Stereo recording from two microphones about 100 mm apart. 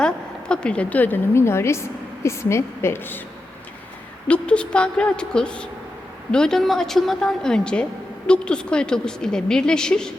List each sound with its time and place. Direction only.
0.0 s a woman's voice: 10° left (ahead or behind)
4.3 s a woman's voice: 10° left (ahead or behind)